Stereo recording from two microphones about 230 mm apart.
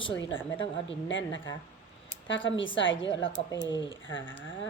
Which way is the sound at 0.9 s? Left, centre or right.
Left.